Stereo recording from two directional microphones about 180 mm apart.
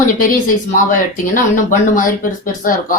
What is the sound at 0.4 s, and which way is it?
A woman's voice, 50° left (ahead or behind).